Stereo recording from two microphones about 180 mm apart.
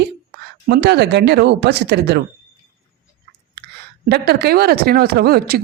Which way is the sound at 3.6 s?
60° right (ahead or behind).